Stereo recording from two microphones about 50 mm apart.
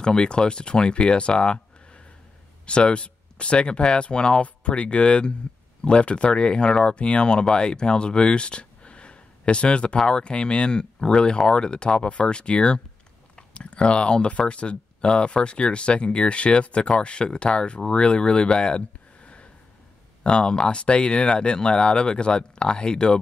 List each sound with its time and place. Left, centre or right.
0.0 s speech: centre
2.6 s speech: left